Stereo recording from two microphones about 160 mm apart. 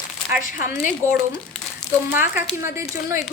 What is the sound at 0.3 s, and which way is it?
Speech, 55° left (ahead or behind).